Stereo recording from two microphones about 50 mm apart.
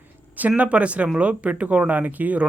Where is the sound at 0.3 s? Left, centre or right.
Right.